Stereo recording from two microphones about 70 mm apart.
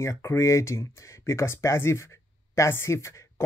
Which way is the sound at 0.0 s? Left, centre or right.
Left.